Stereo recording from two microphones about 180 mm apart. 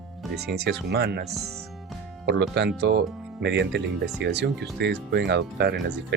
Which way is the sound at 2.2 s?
70° right (ahead or behind).